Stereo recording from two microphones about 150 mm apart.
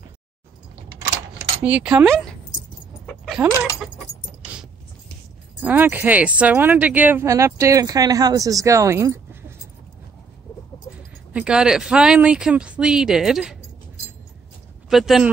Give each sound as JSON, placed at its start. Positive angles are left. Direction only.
{"t": 1.6, "sound": "speech", "side_deg": -10}
{"t": 3.1, "sound": "a sound", "side_deg": 0}
{"t": 5.6, "sound": "speech", "side_deg": -10}
{"t": 11.3, "sound": "speech", "side_deg": -5}
{"t": 14.9, "sound": "speech", "side_deg": 0}